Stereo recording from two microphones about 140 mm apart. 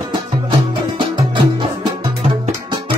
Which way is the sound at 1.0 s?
35° right (ahead or behind).